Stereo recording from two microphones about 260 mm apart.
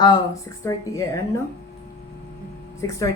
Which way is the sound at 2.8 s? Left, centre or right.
Centre.